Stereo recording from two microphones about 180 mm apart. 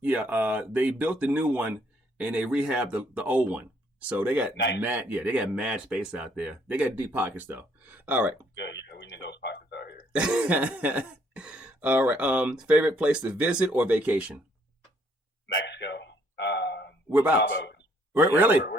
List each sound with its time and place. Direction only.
0.0 s cough: 10° right (ahead or behind)
8.5 s speech: 75° left (ahead or behind)
10.1 s cough: 5° right (ahead or behind)
15.5 s a sound: 75° left (ahead or behind)
17.1 s a man's voice: 10° right (ahead or behind)
17.5 s speech: 75° left (ahead or behind)
18.1 s cough: 10° right (ahead or behind)